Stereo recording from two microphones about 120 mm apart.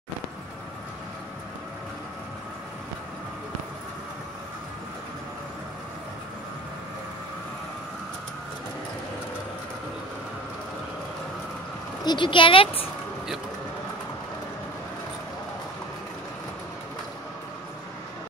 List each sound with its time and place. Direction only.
12.0 s speech: 40° left (ahead or behind)